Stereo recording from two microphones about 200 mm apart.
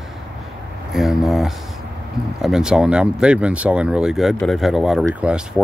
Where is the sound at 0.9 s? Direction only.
Centre (ahead or behind).